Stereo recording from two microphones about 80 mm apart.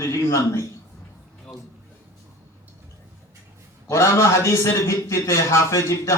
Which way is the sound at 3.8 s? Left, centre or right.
Left.